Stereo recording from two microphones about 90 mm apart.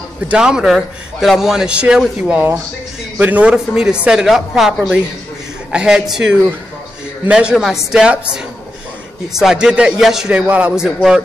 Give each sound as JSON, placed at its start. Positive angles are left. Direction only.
{"t": 0.3, "sound": "a man's voice", "side_deg": -10}